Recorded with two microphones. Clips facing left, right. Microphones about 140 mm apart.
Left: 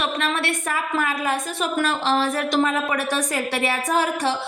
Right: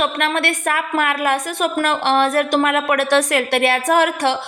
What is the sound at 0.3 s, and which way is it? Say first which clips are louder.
A woman's voice: right 5 dB; 65° right (ahead or behind).